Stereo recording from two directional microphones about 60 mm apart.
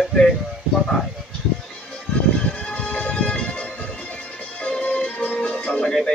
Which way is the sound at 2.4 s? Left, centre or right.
Centre.